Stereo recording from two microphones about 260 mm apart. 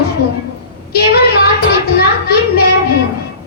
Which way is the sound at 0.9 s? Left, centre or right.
Left.